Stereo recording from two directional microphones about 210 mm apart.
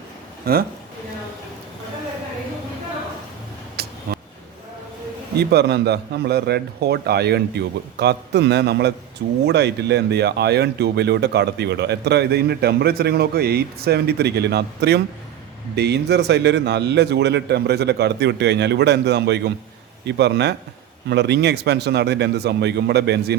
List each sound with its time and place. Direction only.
0.4 s speech: 45° right (ahead or behind)
3.8 s a sound: 50° right (ahead or behind)
5.4 s speech: 50° right (ahead or behind)